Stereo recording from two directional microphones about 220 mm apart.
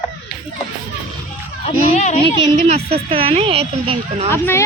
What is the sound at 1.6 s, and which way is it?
Speech, 30° left (ahead or behind).